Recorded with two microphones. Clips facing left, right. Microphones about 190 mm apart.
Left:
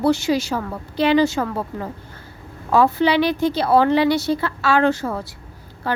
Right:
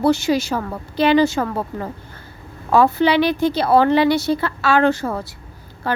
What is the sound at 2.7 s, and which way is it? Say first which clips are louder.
Speech: right 1 dB; 55° right (ahead or behind).